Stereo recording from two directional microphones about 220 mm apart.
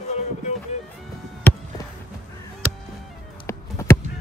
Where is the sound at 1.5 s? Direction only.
10° left (ahead or behind).